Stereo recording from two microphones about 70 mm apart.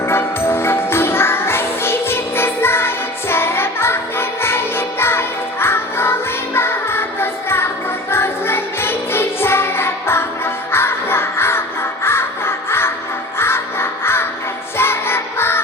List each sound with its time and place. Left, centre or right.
0.1 s music: left
13.4 s crow: left
14.8 s music: left